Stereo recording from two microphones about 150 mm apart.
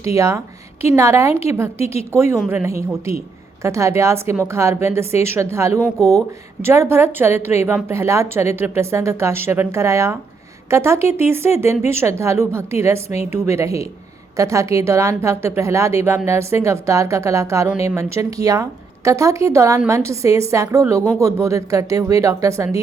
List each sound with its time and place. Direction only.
0.0 s a woman's voice: 20° right (ahead or behind)